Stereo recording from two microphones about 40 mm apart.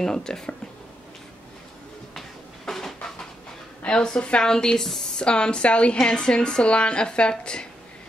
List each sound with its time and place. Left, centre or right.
0.0 s speech: centre
2.1 s a sound: centre
3.8 s a woman's voice: left